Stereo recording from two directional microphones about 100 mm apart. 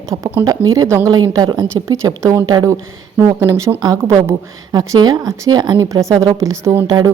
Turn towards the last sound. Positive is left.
turn(degrees=-40)  # may be behind; listen again after turning